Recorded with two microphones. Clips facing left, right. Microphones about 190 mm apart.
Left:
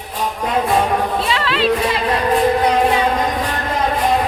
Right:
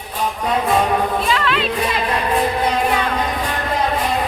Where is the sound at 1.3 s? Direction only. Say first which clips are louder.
Right 1 dB; 30° left (ahead or behind).